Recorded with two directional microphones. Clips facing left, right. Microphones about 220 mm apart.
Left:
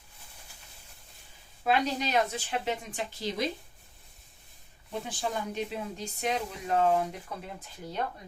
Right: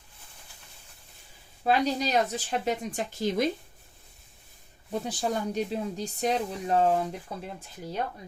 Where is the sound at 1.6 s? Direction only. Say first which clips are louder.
Right 3 dB; 35° right (ahead or behind).